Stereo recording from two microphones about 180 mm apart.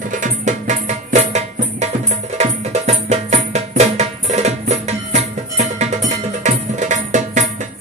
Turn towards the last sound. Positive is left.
turn(degrees=-40)  # may be behind; listen again after turning